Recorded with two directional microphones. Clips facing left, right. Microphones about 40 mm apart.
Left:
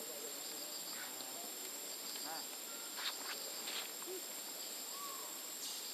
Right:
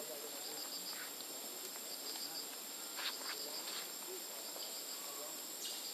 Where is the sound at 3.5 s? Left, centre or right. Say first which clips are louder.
Left 1 dB; left.